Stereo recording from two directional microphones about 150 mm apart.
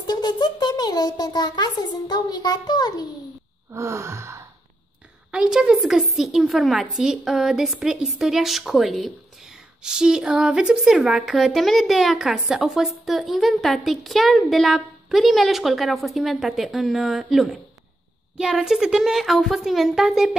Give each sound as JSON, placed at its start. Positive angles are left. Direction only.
{"t": 0.0, "sound": "a child's voice", "side_deg": 25}
{"t": 3.7, "sound": "gasp", "side_deg": -20}
{"t": 5.3, "sound": "a woman's voice", "side_deg": -5}